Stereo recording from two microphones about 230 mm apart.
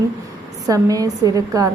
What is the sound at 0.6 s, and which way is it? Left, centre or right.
A woman's voice, centre.